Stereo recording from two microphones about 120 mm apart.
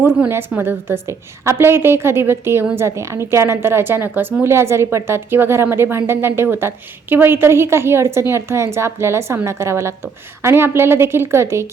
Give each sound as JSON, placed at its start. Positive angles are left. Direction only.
{"t": 0.0, "sound": "a woman's voice", "side_deg": -20}